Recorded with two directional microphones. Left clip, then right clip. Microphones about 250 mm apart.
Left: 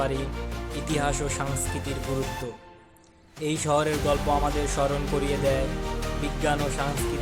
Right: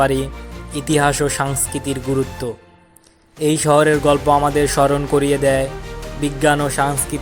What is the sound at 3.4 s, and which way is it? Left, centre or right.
Speech, right.